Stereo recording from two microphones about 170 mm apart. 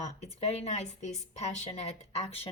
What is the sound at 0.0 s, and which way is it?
Speech, 40° left (ahead or behind).